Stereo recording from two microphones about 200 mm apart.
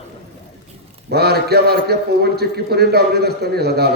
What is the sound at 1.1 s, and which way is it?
A man's voice, 55° right (ahead or behind).